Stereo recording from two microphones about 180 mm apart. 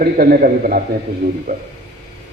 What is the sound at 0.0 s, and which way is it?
A man's voice, 55° right (ahead or behind).